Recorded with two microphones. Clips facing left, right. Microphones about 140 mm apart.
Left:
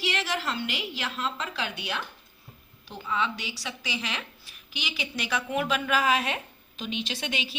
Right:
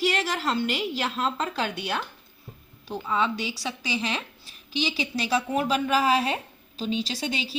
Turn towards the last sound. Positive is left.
turn(degrees=-35)  # may be behind; listen again after turning